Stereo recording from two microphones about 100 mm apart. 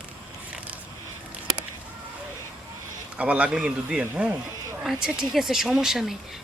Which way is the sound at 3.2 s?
15° right (ahead or behind).